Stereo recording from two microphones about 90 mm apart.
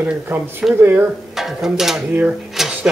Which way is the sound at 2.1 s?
20° right (ahead or behind).